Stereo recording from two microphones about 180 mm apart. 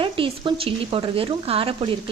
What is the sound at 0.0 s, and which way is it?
Speech, 30° right (ahead or behind).